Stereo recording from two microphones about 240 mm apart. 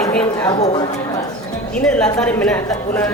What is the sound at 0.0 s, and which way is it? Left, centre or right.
Speech, centre.